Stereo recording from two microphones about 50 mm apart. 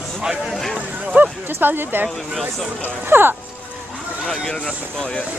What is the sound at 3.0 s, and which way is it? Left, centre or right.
Speech, right.